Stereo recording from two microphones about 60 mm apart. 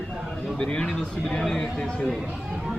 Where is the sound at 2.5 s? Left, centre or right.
Centre.